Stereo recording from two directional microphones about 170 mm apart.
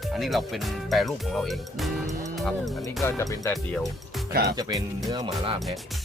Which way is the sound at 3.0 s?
20° left (ahead or behind).